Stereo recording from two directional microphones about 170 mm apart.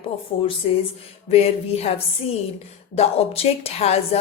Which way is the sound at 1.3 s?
40° left (ahead or behind).